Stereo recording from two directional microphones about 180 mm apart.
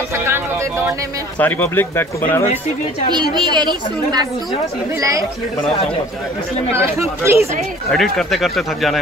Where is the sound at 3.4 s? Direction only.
25° right (ahead or behind).